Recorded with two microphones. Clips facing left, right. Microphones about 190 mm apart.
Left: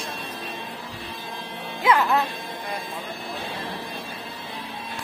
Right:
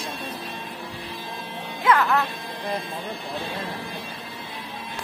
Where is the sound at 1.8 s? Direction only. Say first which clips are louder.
Even; 15° left (ahead or behind).